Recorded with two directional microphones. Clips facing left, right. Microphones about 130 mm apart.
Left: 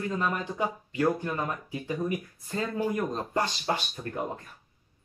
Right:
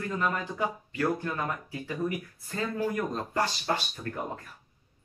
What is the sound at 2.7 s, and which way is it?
Speech, 20° left (ahead or behind).